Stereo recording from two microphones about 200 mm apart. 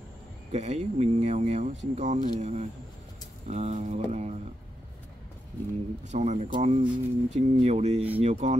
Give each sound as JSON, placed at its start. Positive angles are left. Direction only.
{"t": 0.5, "sound": "speech", "side_deg": -35}
{"t": 6.1, "sound": "speech", "side_deg": -35}